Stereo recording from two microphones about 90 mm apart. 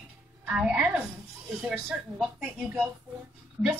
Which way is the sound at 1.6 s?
Centre (ahead or behind).